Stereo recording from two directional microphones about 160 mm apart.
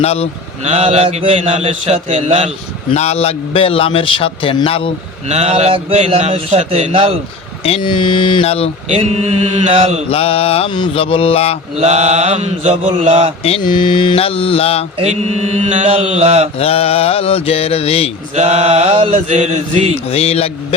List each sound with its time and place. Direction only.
0.0 s a man's voice: 40° left (ahead or behind)
0.6 s speech: 40° right (ahead or behind)
2.9 s a man's voice: 40° left (ahead or behind)
5.3 s speech: 40° right (ahead or behind)
7.6 s a man's voice: 35° left (ahead or behind)
8.9 s speech: 40° right (ahead or behind)
10.1 s a man's voice: 40° left (ahead or behind)
11.8 s speech: 40° right (ahead or behind)
13.4 s a man's voice: 35° left (ahead or behind)
14.9 s mantra: 40° right (ahead or behind)
16.6 s a man's voice: 40° left (ahead or behind)
18.3 s speech: 40° right (ahead or behind)
19.3 s mantra: 45° right (ahead or behind)
20.1 s a man's voice: 40° left (ahead or behind)